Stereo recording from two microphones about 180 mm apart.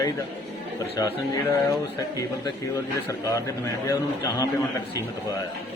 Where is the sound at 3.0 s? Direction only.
15° left (ahead or behind).